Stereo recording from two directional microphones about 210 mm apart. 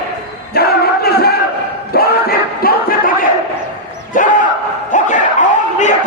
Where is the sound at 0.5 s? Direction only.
50° left (ahead or behind).